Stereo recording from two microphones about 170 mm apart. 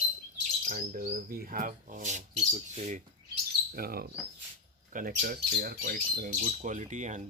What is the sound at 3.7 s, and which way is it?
Speech, 65° right (ahead or behind).